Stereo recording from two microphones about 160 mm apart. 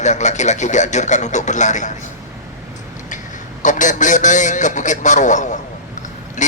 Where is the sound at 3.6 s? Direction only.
50° left (ahead or behind).